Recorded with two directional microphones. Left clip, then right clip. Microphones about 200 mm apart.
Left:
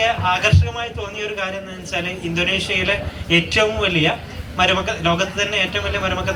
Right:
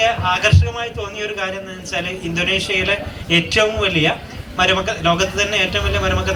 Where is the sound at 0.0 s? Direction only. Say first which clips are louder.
Right 1 dB; 25° right (ahead or behind).